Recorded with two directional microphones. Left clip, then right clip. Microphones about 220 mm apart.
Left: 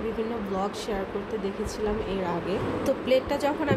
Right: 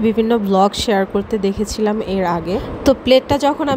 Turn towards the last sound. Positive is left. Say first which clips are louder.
# right 10 dB
turn(degrees=-35)  # may be behind; listen again after turning